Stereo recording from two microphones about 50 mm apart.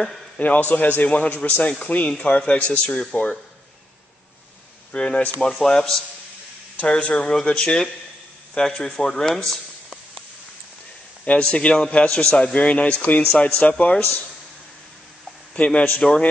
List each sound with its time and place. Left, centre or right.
0.4 s a man's voice: left
0.7 s a man's voice: left
1.0 s a man's voice: left
1.8 s a man's voice: left
4.9 s speech: centre
6.8 s a man's voice: left; by 9.4 s centre
11.2 s a man's voice: centre
15.5 s a man's voice: left